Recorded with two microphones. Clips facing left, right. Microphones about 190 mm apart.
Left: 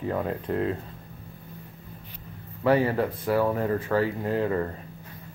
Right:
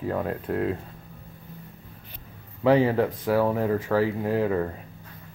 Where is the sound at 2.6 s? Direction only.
15° right (ahead or behind).